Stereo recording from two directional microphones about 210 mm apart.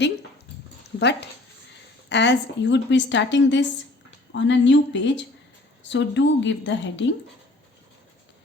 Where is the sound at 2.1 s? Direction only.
55° left (ahead or behind).